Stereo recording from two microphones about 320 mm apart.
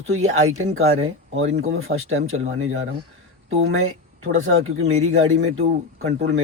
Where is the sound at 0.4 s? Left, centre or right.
Right.